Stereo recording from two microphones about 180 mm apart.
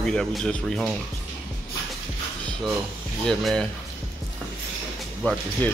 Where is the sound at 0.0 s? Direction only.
5° left (ahead or behind).